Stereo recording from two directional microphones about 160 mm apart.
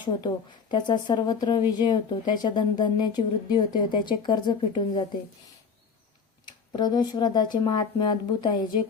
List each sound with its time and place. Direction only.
0.0 s speech: 25° left (ahead or behind)
6.4 s speech: 25° left (ahead or behind)